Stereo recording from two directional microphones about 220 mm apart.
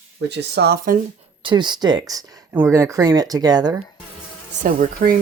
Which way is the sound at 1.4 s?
20° right (ahead or behind).